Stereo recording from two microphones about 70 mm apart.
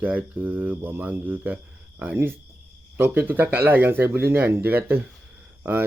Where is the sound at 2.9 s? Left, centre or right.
Right.